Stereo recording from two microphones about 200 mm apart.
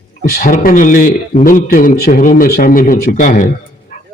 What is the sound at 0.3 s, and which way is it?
A man's voice, 45° left (ahead or behind).